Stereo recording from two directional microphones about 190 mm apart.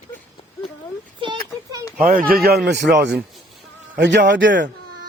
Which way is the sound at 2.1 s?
45° right (ahead or behind).